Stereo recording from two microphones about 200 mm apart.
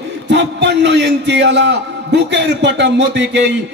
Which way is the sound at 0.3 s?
60° right (ahead or behind).